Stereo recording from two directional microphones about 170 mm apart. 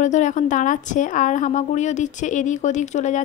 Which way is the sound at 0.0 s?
45° left (ahead or behind).